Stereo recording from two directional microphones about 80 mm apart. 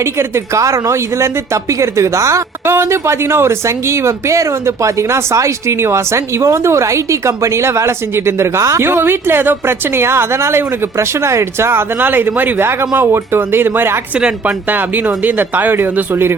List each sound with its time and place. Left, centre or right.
0.0 s speech: right
14.2 s a woman's voice: centre
14.7 s speech: right